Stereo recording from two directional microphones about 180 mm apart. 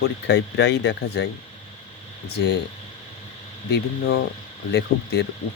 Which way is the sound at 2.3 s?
65° left (ahead or behind).